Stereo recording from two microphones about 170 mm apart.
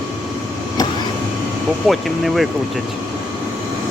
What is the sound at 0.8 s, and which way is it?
Vehicle, 25° left (ahead or behind).